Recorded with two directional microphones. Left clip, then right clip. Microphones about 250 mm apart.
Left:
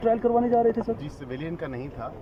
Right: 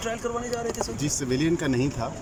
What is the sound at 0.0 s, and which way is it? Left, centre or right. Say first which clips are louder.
Speech: left 7 dB; left.